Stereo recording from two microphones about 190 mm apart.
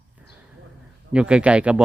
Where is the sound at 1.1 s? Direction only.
5° right (ahead or behind).